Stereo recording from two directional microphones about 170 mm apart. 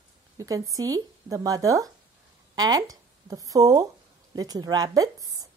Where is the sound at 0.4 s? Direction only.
20° right (ahead or behind).